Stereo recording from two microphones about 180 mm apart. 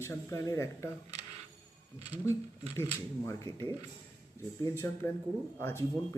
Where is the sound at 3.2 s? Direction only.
15° left (ahead or behind).